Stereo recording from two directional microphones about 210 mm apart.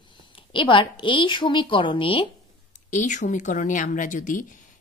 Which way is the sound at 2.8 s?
35° left (ahead or behind).